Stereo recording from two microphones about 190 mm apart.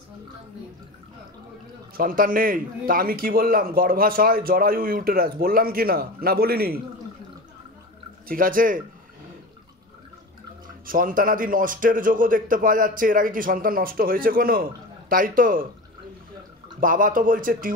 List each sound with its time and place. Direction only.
2.0 s a man's voice: 50° right (ahead or behind)
8.3 s a man's voice: 45° right (ahead or behind)
10.9 s a man's voice: 45° right (ahead or behind)
16.8 s a man's voice: 45° right (ahead or behind)